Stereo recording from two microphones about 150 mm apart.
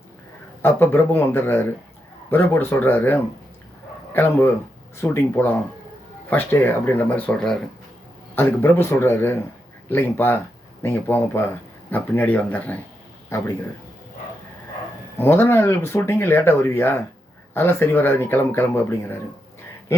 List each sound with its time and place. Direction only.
0.6 s speech: 15° left (ahead or behind)
8.4 s a man's voice: 15° left (ahead or behind)
15.2 s a man's voice: 15° left (ahead or behind)